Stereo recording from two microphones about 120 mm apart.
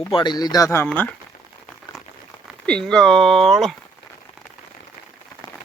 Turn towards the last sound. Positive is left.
turn(degrees=0)  # may be behind; listen again after turning